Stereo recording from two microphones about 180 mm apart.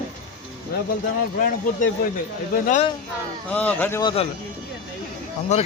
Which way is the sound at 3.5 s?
10° left (ahead or behind).